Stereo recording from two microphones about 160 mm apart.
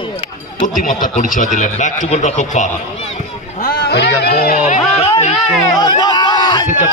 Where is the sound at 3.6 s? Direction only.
90° left.